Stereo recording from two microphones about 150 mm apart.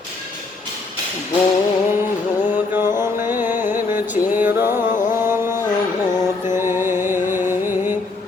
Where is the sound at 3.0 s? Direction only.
15° right (ahead or behind).